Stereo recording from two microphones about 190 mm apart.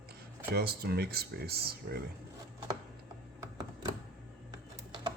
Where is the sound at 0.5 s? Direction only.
55° right (ahead or behind).